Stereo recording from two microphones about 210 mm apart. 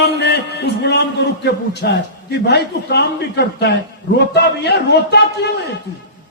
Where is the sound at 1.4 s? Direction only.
50° left (ahead or behind).